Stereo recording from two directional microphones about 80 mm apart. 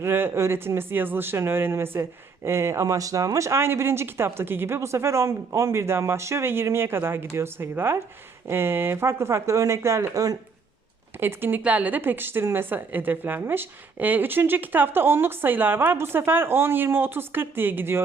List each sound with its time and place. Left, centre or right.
0.0 s speech: right
2.8 s speech: right
11.2 s speech: right